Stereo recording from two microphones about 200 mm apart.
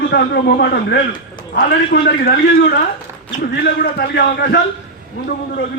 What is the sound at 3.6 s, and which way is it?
A man's voice, 50° left (ahead or behind).